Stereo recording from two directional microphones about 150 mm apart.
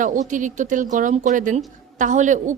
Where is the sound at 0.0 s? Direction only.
60° right (ahead or behind).